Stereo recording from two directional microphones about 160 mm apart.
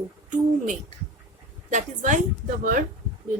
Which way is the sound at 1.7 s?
50° right (ahead or behind).